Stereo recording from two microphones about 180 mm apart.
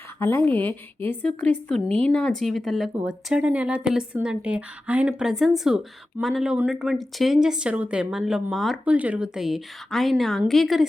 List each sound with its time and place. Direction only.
0.2 s a woman's voice: 15° left (ahead or behind)